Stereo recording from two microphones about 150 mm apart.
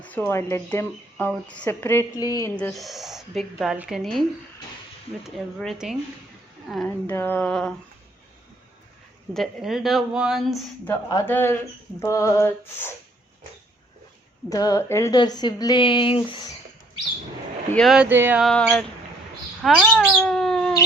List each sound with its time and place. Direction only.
0.0 s speech: 10° left (ahead or behind)
2.6 s speech: 5° left (ahead or behind)
6.8 s speech: 15° left (ahead or behind)
9.3 s speech: centre (ahead or behind)
11.3 s speech: 15° left (ahead or behind)
14.5 s speech: 25° left (ahead or behind)
15.1 s speech: 30° left (ahead or behind)
17.7 s speech: 5° right (ahead or behind)
18.3 s speech: centre (ahead or behind)